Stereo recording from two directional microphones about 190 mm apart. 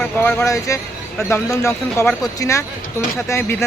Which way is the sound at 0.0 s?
10° left (ahead or behind).